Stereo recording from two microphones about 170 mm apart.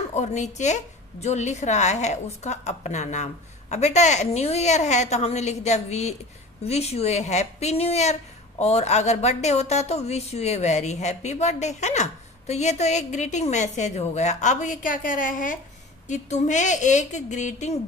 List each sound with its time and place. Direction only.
0.1 s speech: 45° left (ahead or behind)